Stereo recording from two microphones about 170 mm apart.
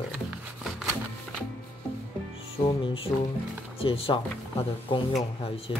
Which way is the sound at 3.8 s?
35° left (ahead or behind).